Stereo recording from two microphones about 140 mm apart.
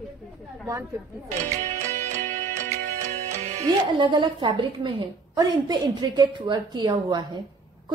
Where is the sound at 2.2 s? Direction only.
55° right (ahead or behind).